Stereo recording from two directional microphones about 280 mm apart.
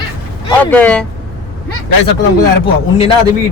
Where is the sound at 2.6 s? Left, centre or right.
Centre.